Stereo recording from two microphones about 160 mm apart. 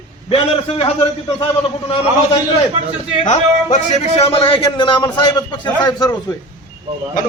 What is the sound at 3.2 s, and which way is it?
A man's voice, 45° left (ahead or behind).